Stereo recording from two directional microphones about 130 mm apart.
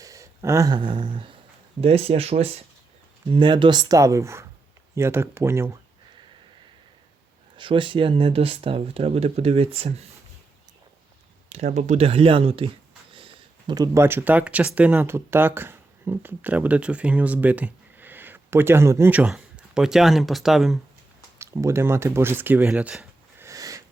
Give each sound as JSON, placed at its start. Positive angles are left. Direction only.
{"t": 0.0, "sound": "a sound", "side_deg": -25}
{"t": 0.7, "sound": "speech", "side_deg": -40}
{"t": 1.8, "sound": "speech", "side_deg": -50}
{"t": 3.2, "sound": "speech", "side_deg": -40}
{"t": 7.5, "sound": "speech", "side_deg": -40}
{"t": 11.4, "sound": "speech", "side_deg": -60}
{"t": 13.1, "sound": "a sound", "side_deg": -40}
{"t": 13.7, "sound": "speech", "side_deg": -25}
{"t": 21.3, "sound": "speech", "side_deg": -20}
{"t": 23.5, "sound": "sniff", "side_deg": -25}